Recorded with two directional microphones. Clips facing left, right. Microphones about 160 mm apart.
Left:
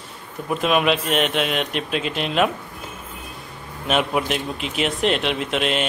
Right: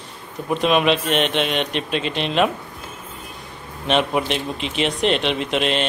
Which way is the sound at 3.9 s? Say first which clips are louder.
Right 1 dB; 5° left (ahead or behind).